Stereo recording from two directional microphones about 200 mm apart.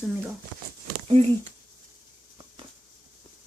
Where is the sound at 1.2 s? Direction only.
30° right (ahead or behind).